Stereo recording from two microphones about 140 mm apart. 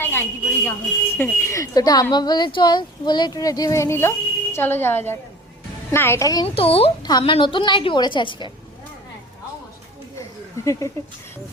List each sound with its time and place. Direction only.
0.0 s a woman's voice: 15° left (ahead or behind)
6.4 s speech: 40° left (ahead or behind)
7.0 s a woman's voice: 30° left (ahead or behind)
10.2 s a sound: 20° left (ahead or behind)